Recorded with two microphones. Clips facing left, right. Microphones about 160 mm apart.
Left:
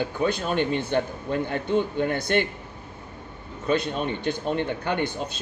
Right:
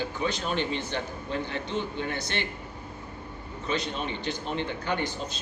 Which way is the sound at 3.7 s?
50° left (ahead or behind).